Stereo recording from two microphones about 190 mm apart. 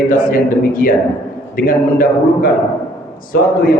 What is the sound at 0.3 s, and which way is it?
A man's voice, 50° left (ahead or behind).